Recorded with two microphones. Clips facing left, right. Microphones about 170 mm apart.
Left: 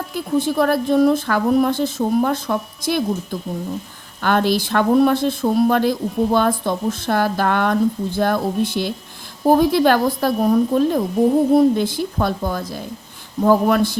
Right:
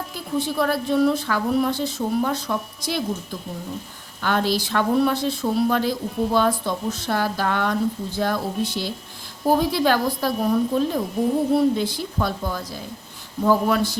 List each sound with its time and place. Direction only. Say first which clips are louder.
0.3 s a woman's voice: left 5 dB; 50° left (ahead or behind)
4.2 s a woman's voice: left 4 dB; 55° left (ahead or behind)